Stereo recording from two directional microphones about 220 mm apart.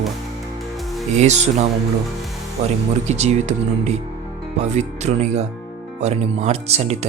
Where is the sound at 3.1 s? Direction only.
30° right (ahead or behind).